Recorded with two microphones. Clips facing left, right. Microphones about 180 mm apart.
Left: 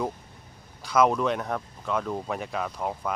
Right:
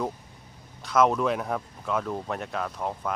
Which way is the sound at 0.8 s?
Centre (ahead or behind).